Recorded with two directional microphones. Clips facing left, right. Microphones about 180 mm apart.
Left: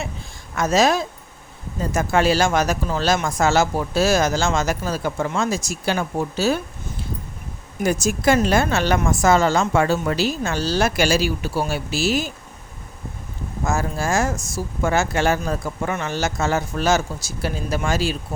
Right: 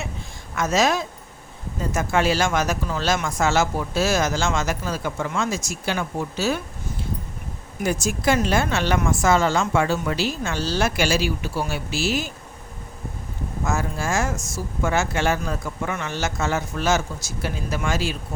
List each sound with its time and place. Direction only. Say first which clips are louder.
0.5 s speech: left 3 dB; 35° left (ahead or behind)
7.9 s speech: left 3 dB; 40° left (ahead or behind)
13.7 s speech: left 3 dB; 35° left (ahead or behind)